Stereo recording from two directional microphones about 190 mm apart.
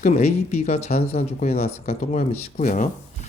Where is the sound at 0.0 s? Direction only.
35° left (ahead or behind).